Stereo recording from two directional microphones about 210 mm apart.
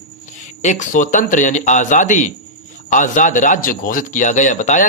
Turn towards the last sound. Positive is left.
turn(degrees=35)  # may be behind; listen again after turning